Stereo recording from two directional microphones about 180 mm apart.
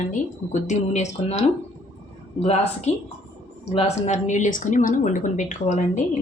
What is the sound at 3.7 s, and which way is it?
A woman's voice, 35° left (ahead or behind).